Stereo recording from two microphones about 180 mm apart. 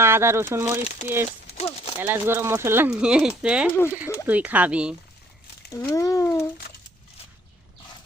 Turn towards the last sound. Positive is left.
turn(degrees=15)  # may be behind; listen again after turning